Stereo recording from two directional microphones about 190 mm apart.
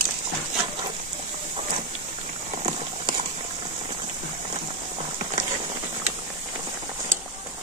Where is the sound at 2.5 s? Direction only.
35° right (ahead or behind).